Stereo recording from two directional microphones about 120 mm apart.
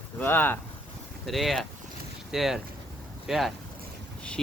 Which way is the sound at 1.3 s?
Centre (ahead or behind).